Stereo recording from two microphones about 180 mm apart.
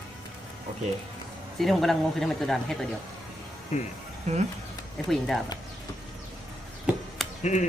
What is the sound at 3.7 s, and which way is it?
Speech, 40° left (ahead or behind).